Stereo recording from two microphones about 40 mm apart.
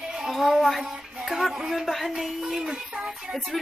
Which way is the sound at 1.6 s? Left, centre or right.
Centre.